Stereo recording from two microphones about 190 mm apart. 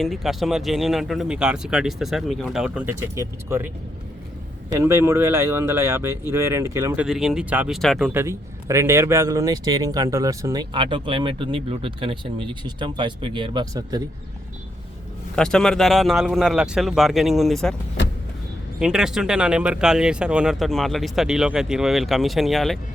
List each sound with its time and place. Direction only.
0.0 s speech: centre (ahead or behind)
4.8 s speech: 15° right (ahead or behind)
15.4 s speech: 5° left (ahead or behind)
18.8 s speech: 5° right (ahead or behind)